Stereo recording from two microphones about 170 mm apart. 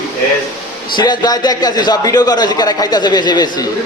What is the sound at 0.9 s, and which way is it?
A man's voice, 25° left (ahead or behind).